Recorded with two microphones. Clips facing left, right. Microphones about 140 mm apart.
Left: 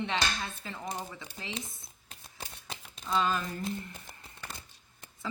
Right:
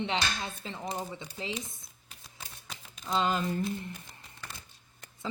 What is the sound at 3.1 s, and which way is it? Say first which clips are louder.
Speech: right 1 dB; 25° right (ahead or behind).